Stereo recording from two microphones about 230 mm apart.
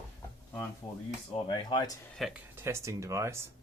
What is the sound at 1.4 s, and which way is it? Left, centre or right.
Speech, centre.